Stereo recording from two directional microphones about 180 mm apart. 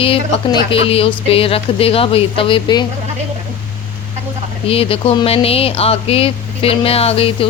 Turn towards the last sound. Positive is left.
turn(degrees=30)  # may be behind; listen again after turning